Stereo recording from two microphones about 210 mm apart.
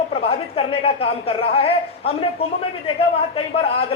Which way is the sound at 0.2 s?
25° left (ahead or behind).